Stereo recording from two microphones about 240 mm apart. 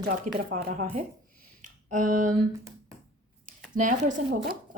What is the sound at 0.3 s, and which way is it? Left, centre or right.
Speech, right.